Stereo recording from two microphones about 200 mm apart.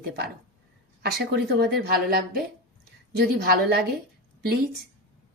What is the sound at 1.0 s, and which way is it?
Speech, 55° right (ahead or behind).